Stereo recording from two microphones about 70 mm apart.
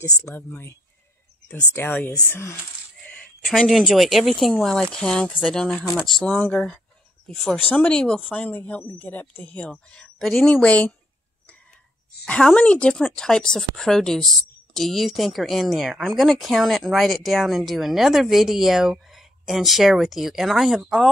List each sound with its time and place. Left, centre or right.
0.3 s speech: left
1.5 s speech: left
3.4 s a woman's voice: centre
12.3 s speech: centre